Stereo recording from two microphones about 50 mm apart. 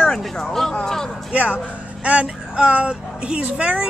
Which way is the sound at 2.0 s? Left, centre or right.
Right.